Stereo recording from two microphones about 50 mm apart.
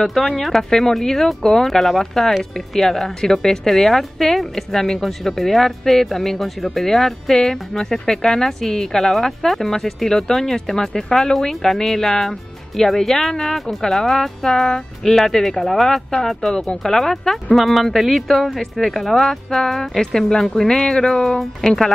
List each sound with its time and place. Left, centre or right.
0.0 s a woman's voice: centre